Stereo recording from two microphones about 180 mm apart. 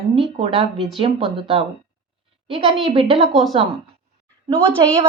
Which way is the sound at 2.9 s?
30° right (ahead or behind).